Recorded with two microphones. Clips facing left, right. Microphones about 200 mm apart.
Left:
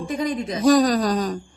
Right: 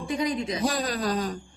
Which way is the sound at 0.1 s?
45° left (ahead or behind).